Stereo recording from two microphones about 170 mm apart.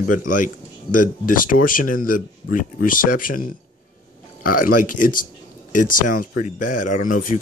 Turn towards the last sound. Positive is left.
turn(degrees=50)  # may be behind; listen again after turning